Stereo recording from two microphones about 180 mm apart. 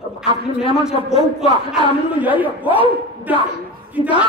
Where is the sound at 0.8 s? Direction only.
5° right (ahead or behind).